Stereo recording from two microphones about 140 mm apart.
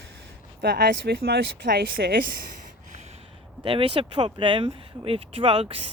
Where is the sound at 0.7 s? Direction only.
90° right.